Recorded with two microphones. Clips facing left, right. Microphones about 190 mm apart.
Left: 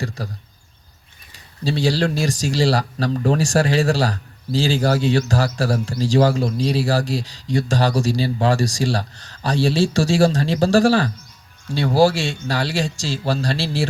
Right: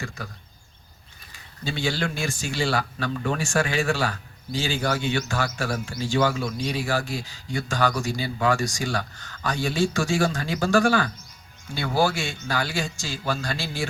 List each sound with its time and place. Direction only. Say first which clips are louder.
0.0 s speech: left 7 dB; 35° left (ahead or behind)
1.6 s speech: left 7 dB; 35° left (ahead or behind)